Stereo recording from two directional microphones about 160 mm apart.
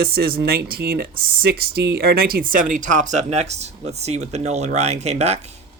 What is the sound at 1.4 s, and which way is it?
Speech, 80° right.